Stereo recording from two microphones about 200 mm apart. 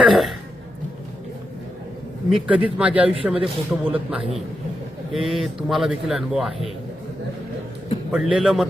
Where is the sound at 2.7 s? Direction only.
5° right (ahead or behind).